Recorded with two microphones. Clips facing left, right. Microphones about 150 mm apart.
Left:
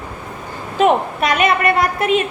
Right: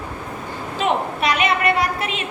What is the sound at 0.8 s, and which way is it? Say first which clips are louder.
A woman's voice: left 6 dB; 50° left (ahead or behind).